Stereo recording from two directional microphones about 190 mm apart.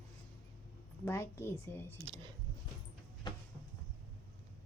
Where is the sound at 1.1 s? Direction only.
15° left (ahead or behind).